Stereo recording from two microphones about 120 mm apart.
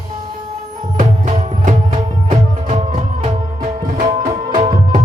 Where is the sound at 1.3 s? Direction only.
90° right.